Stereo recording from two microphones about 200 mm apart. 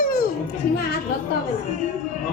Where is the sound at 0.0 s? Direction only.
45° left (ahead or behind).